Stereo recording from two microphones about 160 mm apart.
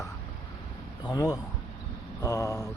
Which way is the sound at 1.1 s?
20° left (ahead or behind).